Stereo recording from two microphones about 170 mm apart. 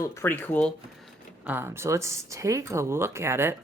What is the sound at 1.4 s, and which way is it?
Speech, 15° right (ahead or behind).